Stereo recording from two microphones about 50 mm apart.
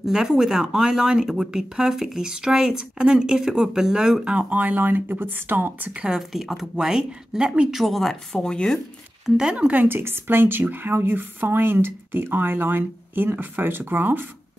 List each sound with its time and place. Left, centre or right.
0.0 s speech: centre; by 5.9 s right
6.1 s speech: centre
7.7 s speech: centre
8.3 s speech: centre
9.4 s speech: centre
9.8 s speech: right